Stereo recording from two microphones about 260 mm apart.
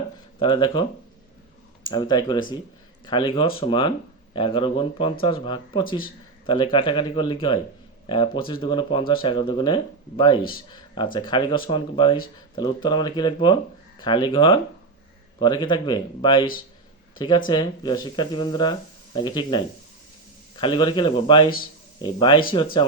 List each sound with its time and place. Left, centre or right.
0.3 s speech: centre
1.9 s speech: centre